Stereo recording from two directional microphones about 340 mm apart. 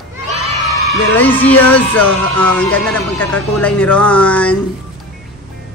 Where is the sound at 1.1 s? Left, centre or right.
Centre.